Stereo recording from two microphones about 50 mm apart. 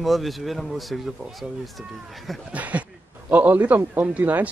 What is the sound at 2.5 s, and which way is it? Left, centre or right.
A man's voice, right.